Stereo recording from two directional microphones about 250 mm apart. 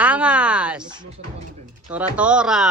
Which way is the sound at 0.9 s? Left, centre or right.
Centre.